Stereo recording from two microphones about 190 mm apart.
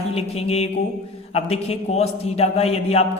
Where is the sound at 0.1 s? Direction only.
30° left (ahead or behind).